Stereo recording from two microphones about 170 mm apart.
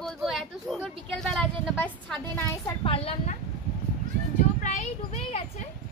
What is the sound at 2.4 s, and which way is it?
Speech, 30° left (ahead or behind).